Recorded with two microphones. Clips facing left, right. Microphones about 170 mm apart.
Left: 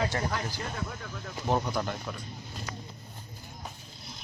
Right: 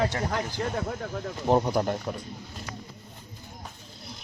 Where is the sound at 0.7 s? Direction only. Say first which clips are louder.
Right 7 dB; 45° right (ahead or behind).